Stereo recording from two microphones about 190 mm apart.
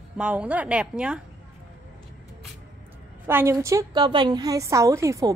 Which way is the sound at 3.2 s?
10° right (ahead or behind).